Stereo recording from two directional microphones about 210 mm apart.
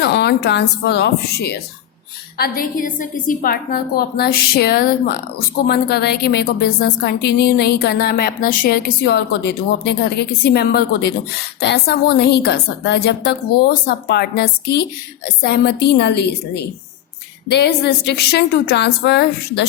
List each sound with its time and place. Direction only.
0.0 s a woman's voice: 50° left (ahead or behind)